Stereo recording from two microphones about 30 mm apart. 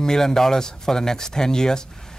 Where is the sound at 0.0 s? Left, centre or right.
Centre.